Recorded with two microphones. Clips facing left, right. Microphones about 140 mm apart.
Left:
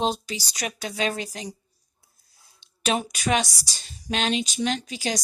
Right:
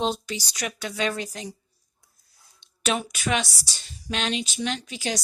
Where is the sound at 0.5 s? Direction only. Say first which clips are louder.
Left 2 dB; 35° left (ahead or behind).